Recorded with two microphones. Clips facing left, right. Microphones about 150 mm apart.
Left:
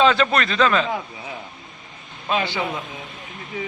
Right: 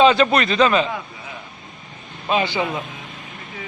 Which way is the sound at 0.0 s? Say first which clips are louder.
Right 3 dB; 10° right (ahead or behind).